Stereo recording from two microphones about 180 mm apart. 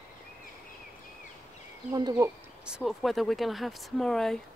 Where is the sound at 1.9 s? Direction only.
20° right (ahead or behind).